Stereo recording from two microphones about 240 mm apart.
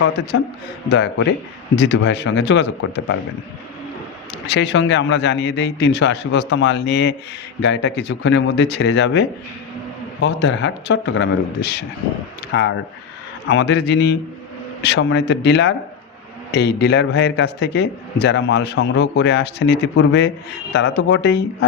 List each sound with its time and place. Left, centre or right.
0.0 s a man's voice: left
4.4 s a man's voice: left